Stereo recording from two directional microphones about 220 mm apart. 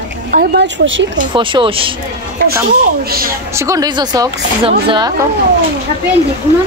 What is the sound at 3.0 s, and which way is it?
Speech, 40° right (ahead or behind).